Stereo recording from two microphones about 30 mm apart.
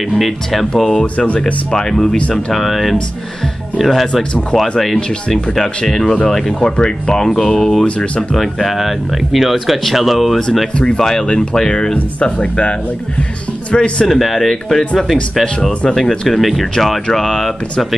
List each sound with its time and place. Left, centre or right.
0.2 s speech: centre
1.1 s speech: left
2.3 s speech: centre
6.2 s speech: left
8.4 s speech: centre
11.0 s speech: centre
11.7 s speech: left
14.0 s speech: centre
15.9 s speech: centre
16.3 s speech: centre
17.1 s speech: centre